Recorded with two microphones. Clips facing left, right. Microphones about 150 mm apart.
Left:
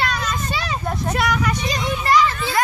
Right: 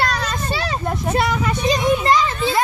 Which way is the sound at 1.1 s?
25° right (ahead or behind).